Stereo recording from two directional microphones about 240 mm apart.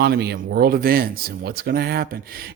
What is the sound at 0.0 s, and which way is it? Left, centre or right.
Speech, right.